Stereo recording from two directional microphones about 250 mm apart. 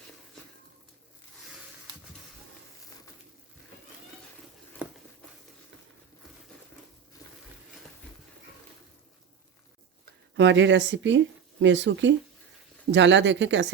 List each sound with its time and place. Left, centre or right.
10.3 s speech: right